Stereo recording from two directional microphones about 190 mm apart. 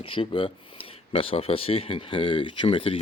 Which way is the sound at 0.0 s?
30° left (ahead or behind).